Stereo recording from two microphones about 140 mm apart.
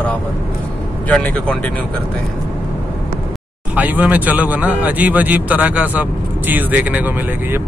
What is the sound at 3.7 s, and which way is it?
Speech, 10° right (ahead or behind).